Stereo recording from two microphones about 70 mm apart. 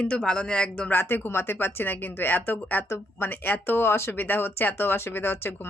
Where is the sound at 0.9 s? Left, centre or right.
Left.